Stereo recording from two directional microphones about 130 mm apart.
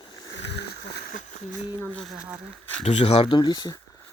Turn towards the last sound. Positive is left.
turn(degrees=35)  # may be behind; listen again after turning